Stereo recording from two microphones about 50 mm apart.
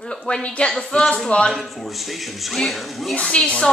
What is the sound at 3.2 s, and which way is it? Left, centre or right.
Speech, centre.